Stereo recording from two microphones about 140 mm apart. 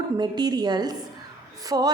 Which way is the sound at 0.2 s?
30° right (ahead or behind).